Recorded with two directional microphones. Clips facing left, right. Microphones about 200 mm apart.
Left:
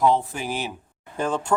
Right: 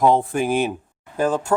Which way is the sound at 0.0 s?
50° right (ahead or behind).